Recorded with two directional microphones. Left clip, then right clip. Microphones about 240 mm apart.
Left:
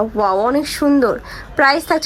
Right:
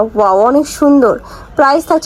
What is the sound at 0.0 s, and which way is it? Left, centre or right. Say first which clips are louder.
Speech: right 6 dB; centre.